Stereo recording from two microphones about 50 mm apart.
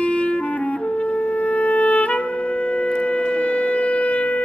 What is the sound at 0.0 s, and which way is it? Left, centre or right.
Music, left.